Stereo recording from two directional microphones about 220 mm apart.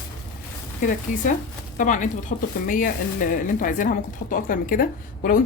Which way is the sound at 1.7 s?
35° left (ahead or behind).